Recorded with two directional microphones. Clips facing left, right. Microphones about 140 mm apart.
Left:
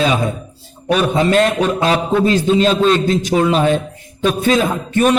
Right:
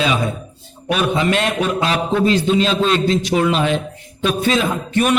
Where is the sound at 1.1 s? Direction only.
40° left (ahead or behind).